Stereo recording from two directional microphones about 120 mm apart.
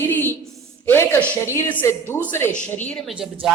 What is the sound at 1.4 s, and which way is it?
A woman's voice, 20° left (ahead or behind).